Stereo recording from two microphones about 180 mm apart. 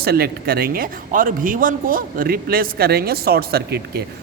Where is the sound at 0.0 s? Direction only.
60° right (ahead or behind).